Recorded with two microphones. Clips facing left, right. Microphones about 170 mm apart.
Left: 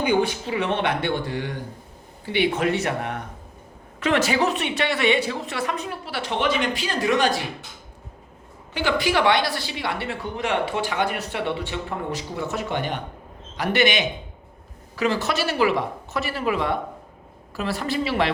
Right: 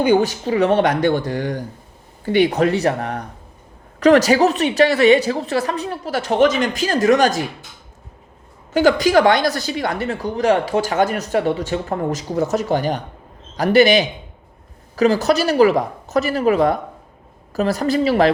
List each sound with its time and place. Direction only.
0.0 s speech: 40° right (ahead or behind)
8.7 s speech: 40° right (ahead or behind)